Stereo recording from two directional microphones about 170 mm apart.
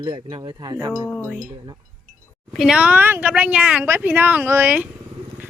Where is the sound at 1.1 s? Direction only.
10° left (ahead or behind).